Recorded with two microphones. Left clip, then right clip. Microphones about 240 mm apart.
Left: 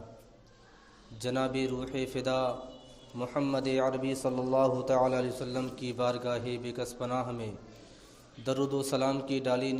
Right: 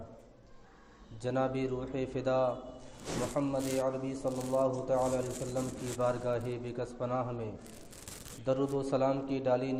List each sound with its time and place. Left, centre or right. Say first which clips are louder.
1.2 s a man's voice: left 1 dB; left